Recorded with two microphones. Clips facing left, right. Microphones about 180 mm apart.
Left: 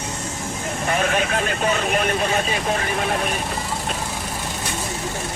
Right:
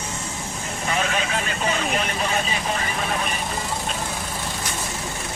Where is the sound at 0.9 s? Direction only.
50° left (ahead or behind).